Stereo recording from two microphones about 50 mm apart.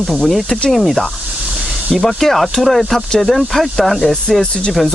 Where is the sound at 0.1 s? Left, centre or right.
Centre.